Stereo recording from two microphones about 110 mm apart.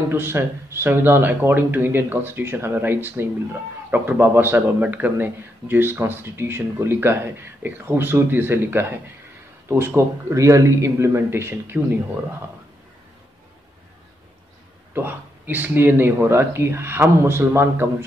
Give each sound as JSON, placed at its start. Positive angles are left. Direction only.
{"t": 0.1, "sound": "speech", "side_deg": -20}
{"t": 15.0, "sound": "speech", "side_deg": -20}